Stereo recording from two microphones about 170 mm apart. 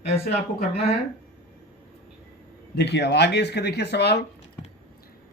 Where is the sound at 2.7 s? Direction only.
85° left.